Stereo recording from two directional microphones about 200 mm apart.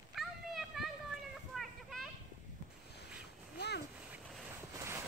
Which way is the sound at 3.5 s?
55° left (ahead or behind).